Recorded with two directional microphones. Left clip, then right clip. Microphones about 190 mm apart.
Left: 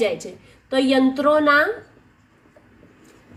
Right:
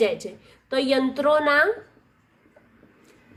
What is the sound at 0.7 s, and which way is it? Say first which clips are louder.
Speech: left 4 dB; 40° right (ahead or behind).